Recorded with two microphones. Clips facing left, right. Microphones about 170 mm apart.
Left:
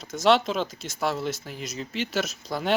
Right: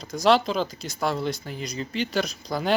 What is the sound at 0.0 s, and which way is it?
Speech, centre (ahead or behind).